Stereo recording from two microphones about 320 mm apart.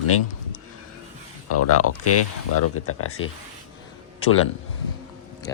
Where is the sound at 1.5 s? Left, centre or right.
Left.